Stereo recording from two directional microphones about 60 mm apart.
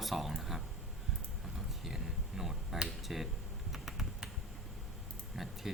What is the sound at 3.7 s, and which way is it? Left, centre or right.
Finger snapping, centre.